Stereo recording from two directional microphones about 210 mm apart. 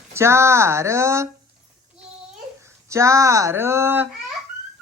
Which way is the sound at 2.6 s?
15° right (ahead or behind).